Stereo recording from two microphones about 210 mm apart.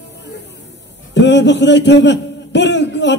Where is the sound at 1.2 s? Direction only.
55° left (ahead or behind).